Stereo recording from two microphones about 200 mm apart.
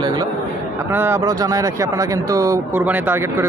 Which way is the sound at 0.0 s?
20° right (ahead or behind).